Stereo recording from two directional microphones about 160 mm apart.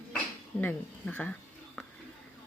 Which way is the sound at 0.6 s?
10° left (ahead or behind).